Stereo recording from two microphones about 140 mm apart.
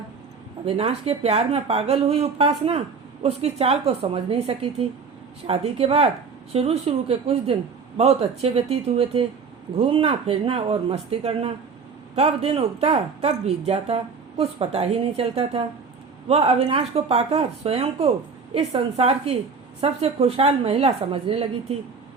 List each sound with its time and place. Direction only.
0.6 s speech: 45° right (ahead or behind)